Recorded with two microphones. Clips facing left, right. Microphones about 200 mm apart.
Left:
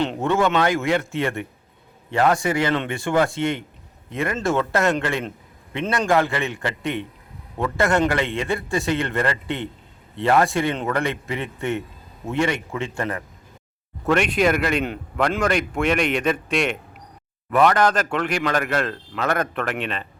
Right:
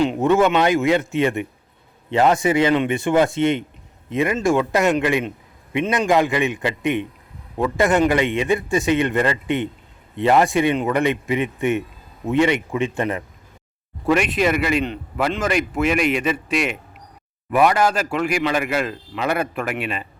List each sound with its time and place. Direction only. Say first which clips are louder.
0.2 s a man's voice: right 3 dB; 15° right (ahead or behind)
14.0 s speech: right 1 dB; 5° right (ahead or behind)